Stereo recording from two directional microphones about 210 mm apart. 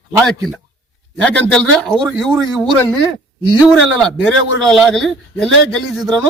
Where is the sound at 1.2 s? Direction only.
5° left (ahead or behind).